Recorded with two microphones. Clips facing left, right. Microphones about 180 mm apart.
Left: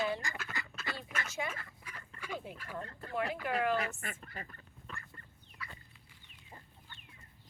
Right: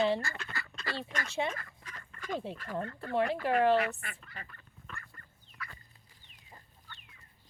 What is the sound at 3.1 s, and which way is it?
Speech, 30° right (ahead or behind).